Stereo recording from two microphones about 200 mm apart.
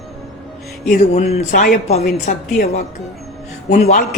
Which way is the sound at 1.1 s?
30° left (ahead or behind).